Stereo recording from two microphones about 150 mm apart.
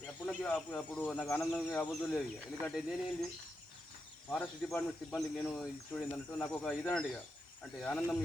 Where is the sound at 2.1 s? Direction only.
Centre (ahead or behind).